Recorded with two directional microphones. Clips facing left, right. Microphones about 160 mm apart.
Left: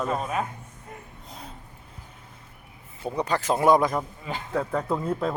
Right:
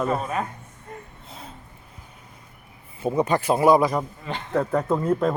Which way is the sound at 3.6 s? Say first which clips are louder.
Right 2 dB; 5° right (ahead or behind).